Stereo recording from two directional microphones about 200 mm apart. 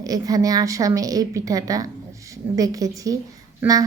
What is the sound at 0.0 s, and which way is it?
A woman's voice, 20° right (ahead or behind).